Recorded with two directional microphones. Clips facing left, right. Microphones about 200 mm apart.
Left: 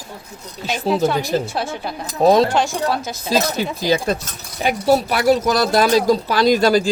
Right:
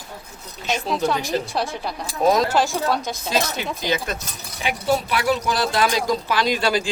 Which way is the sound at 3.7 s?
35° left (ahead or behind).